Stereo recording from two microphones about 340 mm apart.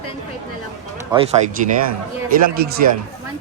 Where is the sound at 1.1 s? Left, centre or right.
Centre.